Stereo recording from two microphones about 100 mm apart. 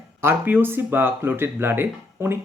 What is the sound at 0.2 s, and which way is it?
Speech, 20° right (ahead or behind).